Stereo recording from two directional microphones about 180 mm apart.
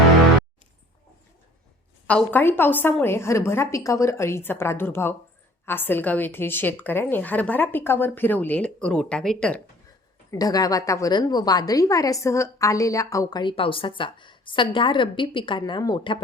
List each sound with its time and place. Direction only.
2.0 s a woman's voice: 10° left (ahead or behind)
10.3 s a woman's voice: 20° left (ahead or behind)